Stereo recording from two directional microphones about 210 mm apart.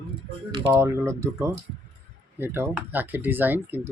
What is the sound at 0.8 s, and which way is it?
Speech, 15° right (ahead or behind).